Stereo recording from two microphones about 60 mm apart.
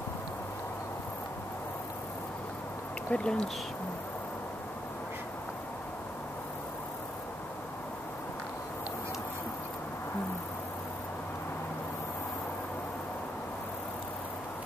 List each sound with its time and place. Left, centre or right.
3.1 s speech: centre